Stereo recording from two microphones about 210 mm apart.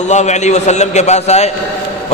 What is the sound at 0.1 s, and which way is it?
A man's voice, 35° left (ahead or behind).